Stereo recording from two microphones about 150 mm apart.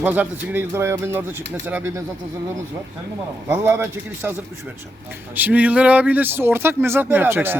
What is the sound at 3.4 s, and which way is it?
Speech, 15° right (ahead or behind).